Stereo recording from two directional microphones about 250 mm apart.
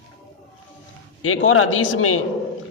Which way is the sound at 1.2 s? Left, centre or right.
Left.